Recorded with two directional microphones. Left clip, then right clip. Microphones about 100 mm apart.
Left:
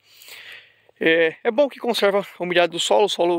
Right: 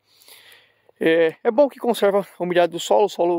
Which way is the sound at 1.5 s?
50° right (ahead or behind).